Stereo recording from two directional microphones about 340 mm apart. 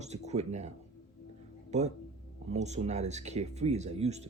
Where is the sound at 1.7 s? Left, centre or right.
Centre.